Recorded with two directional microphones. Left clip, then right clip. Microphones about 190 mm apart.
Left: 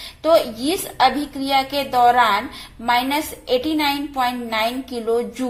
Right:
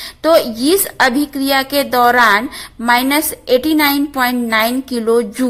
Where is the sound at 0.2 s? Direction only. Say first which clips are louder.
Right 4 dB; 50° right (ahead or behind).